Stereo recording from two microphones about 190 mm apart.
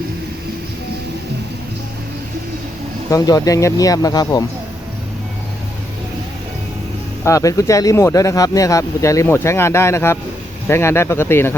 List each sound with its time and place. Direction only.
3.1 s speech: 20° left (ahead or behind)
7.3 s speech: 15° left (ahead or behind)